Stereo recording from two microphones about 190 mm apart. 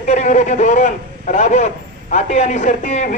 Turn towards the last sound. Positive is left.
turn(degrees=40)  # may be behind; listen again after turning